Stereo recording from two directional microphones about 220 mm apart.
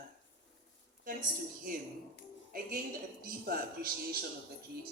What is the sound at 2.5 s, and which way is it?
A man's voice, 40° right (ahead or behind).